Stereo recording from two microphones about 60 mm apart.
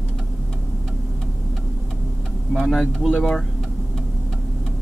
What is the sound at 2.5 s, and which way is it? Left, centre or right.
Speech, centre.